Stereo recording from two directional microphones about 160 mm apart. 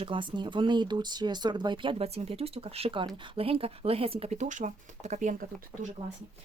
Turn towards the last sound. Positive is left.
turn(degrees=-60)  # may be behind; listen again after turning